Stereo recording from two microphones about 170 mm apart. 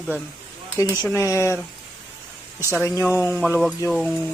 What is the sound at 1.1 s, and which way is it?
Speech, 15° left (ahead or behind).